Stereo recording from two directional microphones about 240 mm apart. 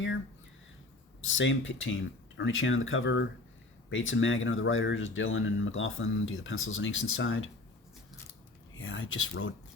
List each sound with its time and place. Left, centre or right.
1.2 s speech: left
8.8 s speech: left